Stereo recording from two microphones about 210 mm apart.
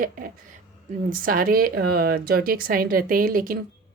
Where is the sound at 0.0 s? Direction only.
40° right (ahead or behind).